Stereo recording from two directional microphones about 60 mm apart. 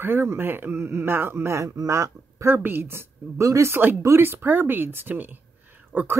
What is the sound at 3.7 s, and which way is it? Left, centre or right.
A woman's voice, right.